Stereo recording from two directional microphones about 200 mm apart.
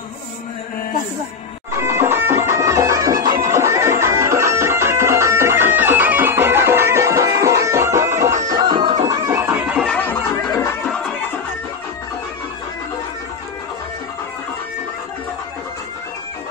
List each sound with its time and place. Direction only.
1.8 s music: 15° right (ahead or behind)
9.8 s music: 10° left (ahead or behind)